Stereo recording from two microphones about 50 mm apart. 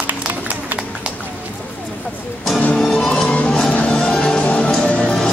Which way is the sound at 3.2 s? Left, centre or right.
Left.